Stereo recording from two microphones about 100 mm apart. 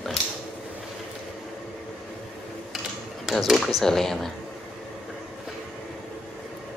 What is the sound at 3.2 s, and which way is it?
Speech, centre (ahead or behind).